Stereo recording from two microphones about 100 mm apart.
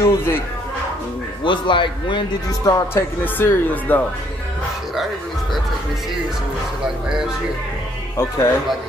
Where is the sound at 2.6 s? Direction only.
35° left (ahead or behind).